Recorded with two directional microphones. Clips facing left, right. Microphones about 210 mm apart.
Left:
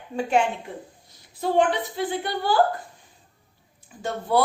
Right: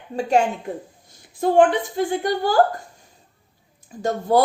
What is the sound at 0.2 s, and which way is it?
A woman's voice, 40° right (ahead or behind).